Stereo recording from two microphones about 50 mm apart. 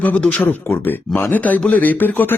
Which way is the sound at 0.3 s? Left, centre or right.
Left.